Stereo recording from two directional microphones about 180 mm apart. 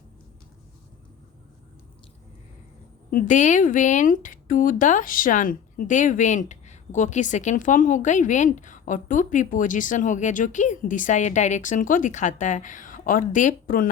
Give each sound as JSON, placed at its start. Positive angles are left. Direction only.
{"t": 3.1, "sound": "a woman's voice", "side_deg": 50}